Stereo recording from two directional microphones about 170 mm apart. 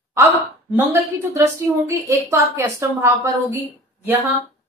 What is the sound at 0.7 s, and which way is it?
A woman's voice, 15° right (ahead or behind).